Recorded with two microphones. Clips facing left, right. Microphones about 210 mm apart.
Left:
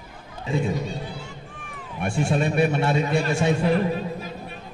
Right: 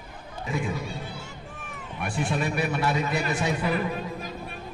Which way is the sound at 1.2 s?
45° right (ahead or behind).